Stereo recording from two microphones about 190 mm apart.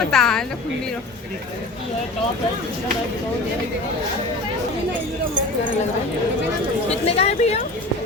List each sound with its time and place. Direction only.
0.1 s a woman's voice: 5° left (ahead or behind)
7.0 s speech: 35° left (ahead or behind)